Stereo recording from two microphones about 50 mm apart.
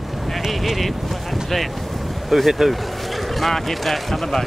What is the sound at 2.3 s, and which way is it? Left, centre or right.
Speech, centre.